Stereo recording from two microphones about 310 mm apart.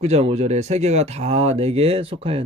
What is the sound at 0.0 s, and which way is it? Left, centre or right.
Speech, centre.